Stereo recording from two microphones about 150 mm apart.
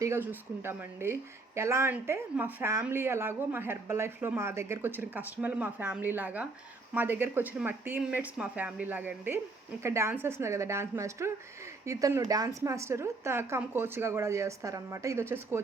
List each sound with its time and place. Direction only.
0.0 s a woman's voice: 15° right (ahead or behind)